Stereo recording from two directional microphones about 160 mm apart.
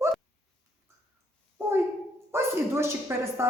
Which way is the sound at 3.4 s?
15° right (ahead or behind).